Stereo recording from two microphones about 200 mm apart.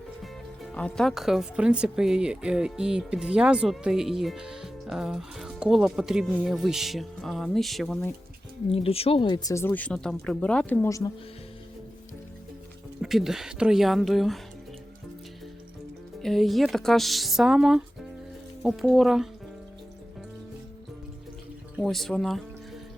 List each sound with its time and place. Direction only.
0.2 s speech: 5° left (ahead or behind)
8.7 s speech: 30° left (ahead or behind)
13.0 s speech: centre (ahead or behind)
16.2 s speech: centre (ahead or behind)
21.8 s speech: centre (ahead or behind)